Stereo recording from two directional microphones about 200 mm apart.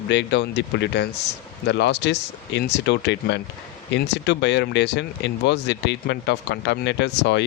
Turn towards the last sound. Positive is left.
turn(degrees=60)  # may be behind; listen again after turning